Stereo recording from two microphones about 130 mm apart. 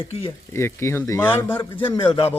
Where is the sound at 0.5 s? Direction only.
20° left (ahead or behind).